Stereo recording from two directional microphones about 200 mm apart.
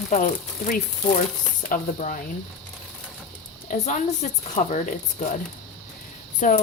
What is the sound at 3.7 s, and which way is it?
Speech, 35° left (ahead or behind).